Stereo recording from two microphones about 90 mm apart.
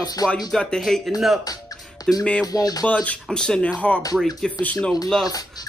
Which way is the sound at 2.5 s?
45° left (ahead or behind).